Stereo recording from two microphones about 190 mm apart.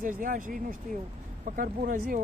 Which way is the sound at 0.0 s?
45° right (ahead or behind).